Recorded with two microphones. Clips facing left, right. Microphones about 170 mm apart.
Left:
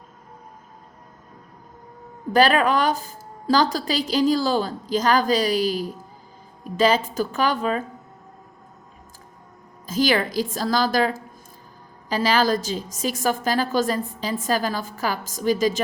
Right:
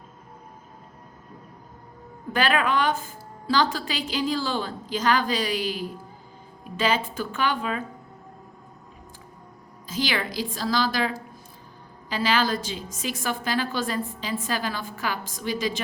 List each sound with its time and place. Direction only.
2.3 s a woman's voice: 40° left (ahead or behind)
9.8 s a woman's voice: 45° left (ahead or behind)